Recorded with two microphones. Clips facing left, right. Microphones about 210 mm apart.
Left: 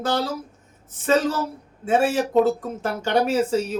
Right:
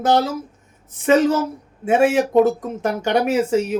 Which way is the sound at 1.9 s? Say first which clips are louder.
Right 4 dB; 15° right (ahead or behind).